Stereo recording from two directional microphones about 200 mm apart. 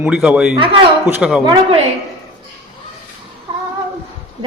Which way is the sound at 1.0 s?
5° right (ahead or behind).